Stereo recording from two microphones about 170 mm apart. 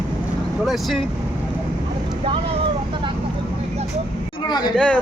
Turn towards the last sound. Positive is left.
turn(degrees=5)  # may be behind; listen again after turning